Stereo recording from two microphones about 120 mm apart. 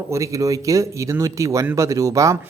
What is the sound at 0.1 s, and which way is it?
Speech, 25° right (ahead or behind).